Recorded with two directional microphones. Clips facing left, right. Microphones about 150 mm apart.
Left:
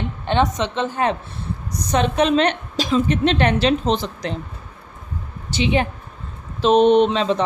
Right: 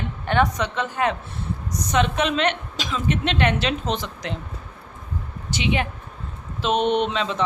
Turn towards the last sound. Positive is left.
turn(degrees=35)  # may be behind; listen again after turning